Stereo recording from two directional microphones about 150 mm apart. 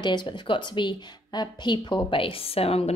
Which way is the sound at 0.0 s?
30° left (ahead or behind).